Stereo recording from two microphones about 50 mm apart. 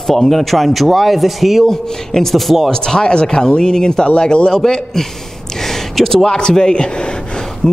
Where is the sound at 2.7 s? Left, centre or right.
Centre.